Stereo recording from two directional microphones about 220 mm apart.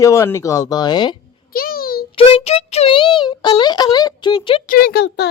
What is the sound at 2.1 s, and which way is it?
Speech, 25° left (ahead or behind).